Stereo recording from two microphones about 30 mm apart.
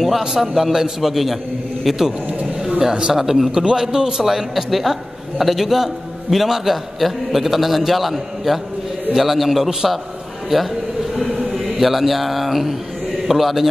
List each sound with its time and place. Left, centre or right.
0.3 s a man's voice: centre
3.1 s a man's voice: centre